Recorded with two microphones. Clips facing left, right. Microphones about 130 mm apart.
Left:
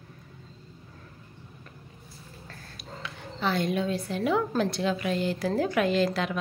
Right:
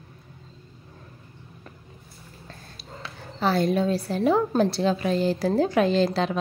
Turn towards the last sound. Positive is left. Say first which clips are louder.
# right 3 dB
turn(degrees=-30)  # may be behind; listen again after turning